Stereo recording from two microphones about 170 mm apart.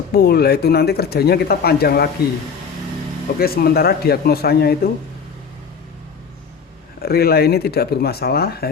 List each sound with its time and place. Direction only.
0.1 s speech: 65° left (ahead or behind)
3.3 s speech: 65° left (ahead or behind)
7.0 s speech: 65° left (ahead or behind)